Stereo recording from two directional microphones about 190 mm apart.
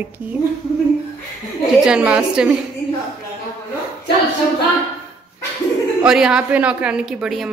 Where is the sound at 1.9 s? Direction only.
5° right (ahead or behind).